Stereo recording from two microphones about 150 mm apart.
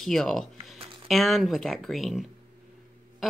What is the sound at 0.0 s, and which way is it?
A woman's voice, centre (ahead or behind).